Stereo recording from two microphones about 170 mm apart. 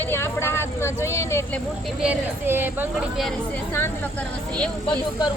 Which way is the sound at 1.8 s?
5° right (ahead or behind).